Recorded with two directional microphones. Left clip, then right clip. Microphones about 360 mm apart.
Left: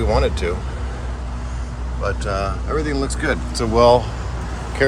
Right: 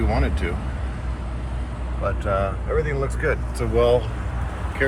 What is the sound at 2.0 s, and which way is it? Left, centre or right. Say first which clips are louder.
Speech: left 1 dB; centre.